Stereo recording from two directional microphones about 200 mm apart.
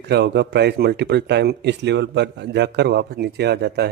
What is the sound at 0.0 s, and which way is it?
A man's voice, 60° right (ahead or behind).